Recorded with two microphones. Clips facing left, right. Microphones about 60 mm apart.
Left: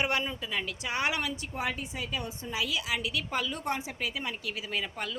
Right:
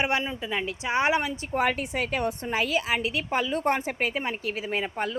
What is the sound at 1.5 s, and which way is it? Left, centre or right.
A woman's voice, right.